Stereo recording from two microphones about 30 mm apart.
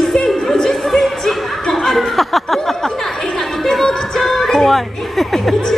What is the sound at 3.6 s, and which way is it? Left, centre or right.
Music, centre.